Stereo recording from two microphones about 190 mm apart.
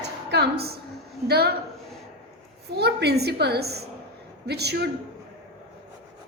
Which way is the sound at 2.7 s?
60° right (ahead or behind).